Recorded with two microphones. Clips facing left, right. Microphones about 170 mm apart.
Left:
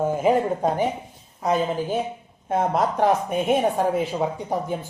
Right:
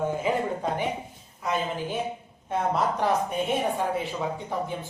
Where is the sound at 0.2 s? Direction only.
45° left (ahead or behind).